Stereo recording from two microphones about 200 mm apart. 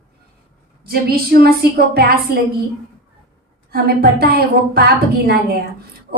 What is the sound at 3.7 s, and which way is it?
A woman's voice, 50° right (ahead or behind).